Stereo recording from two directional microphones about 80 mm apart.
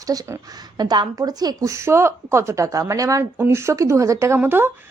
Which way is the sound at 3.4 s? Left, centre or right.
Right.